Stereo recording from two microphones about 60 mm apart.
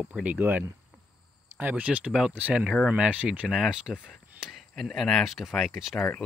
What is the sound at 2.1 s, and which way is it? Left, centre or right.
Speech, centre.